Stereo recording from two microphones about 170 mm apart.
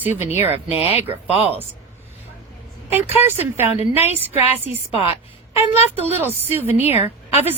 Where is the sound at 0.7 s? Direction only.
35° left (ahead or behind).